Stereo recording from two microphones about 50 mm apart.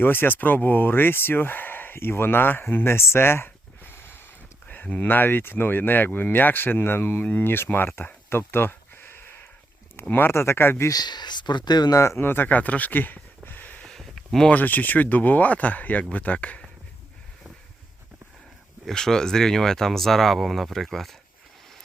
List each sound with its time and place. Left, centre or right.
0.0 s speech: left
5.0 s speech: left
12.1 s speech: left
13.8 s a sound: centre
14.5 s speech: left
18.9 s speech: centre